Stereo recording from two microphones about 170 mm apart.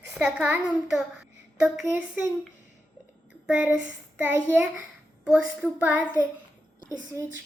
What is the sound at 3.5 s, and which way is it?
A woman's voice, 10° right (ahead or behind).